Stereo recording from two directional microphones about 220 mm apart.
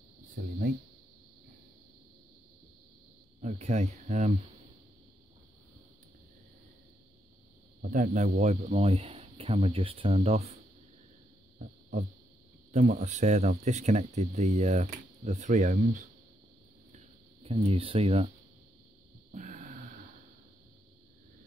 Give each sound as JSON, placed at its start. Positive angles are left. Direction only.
{"t": 3.3, "sound": "speech", "side_deg": -30}
{"t": 7.8, "sound": "speech", "side_deg": -35}
{"t": 11.5, "sound": "insect", "side_deg": -35}
{"t": 12.7, "sound": "speech", "side_deg": -30}
{"t": 16.9, "sound": "a sound", "side_deg": -25}
{"t": 19.3, "sound": "a sound", "side_deg": -35}